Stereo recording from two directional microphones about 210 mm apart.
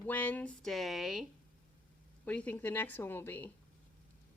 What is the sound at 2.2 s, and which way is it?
A woman's voice, 5° left (ahead or behind).